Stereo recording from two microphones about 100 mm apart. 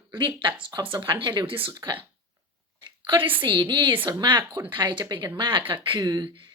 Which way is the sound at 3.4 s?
50° right (ahead or behind).